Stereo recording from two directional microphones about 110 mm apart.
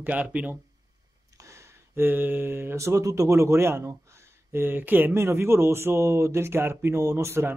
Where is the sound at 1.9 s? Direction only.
20° right (ahead or behind).